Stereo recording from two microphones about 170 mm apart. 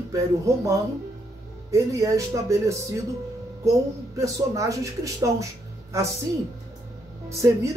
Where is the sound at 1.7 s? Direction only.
20° right (ahead or behind).